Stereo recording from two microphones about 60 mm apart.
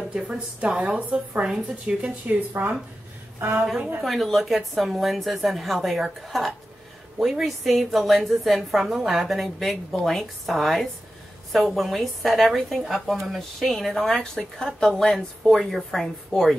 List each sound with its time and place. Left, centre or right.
0.1 s a woman's voice: centre
0.9 s speech: right
1.4 s a woman's voice: centre
2.0 s speech: right
4.0 s a woman's voice: centre